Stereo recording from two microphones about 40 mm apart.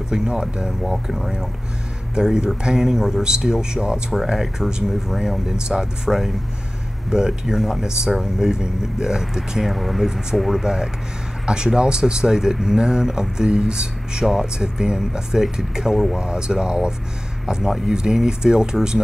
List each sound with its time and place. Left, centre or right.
0.1 s speech: centre
4.1 s speech: centre
9.8 s speech: centre
10.6 s speech: centre
16.2 s speech: right